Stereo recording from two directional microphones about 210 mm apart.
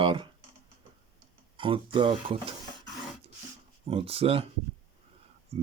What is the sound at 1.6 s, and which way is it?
Speech, 25° right (ahead or behind).